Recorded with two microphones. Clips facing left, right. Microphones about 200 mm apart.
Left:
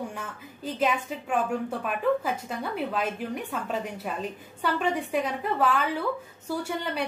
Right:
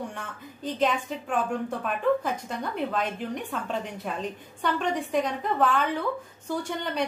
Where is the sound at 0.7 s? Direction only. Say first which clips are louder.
Right 1 dB; 5° left (ahead or behind).